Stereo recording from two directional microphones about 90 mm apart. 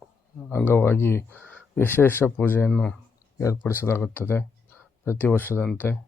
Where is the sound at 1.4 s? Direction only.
15° left (ahead or behind).